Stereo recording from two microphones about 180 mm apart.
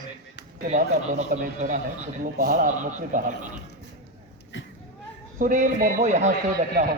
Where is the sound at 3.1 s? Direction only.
45° right (ahead or behind).